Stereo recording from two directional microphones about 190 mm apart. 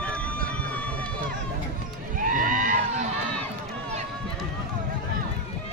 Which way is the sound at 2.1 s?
45° right (ahead or behind).